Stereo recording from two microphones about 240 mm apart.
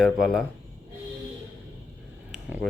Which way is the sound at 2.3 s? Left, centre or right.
Centre.